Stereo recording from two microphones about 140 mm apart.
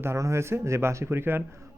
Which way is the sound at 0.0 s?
20° right (ahead or behind).